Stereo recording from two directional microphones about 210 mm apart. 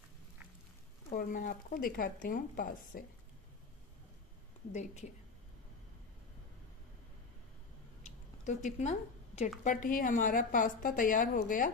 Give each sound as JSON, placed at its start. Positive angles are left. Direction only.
{"t": 1.1, "sound": "a woman's voice", "side_deg": 40}
{"t": 4.7, "sound": "a woman's voice", "side_deg": 35}
{"t": 8.0, "sound": "a sound", "side_deg": 35}
{"t": 9.7, "sound": "a woman's voice", "side_deg": 40}